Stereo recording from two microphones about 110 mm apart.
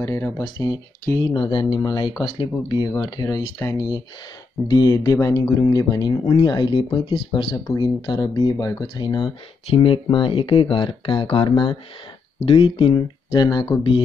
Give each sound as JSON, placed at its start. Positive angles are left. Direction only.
{"t": 0.0, "sound": "speech", "side_deg": 30}
{"t": 1.2, "sound": "speech", "side_deg": 45}
{"t": 3.5, "sound": "speech", "side_deg": 25}
{"t": 4.6, "sound": "speech", "side_deg": 40}
{"t": 7.6, "sound": "speech", "side_deg": 30}
{"t": 13.4, "sound": "speech", "side_deg": 40}